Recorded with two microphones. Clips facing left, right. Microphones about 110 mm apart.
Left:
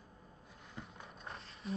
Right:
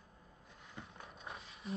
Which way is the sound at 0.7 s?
Centre (ahead or behind).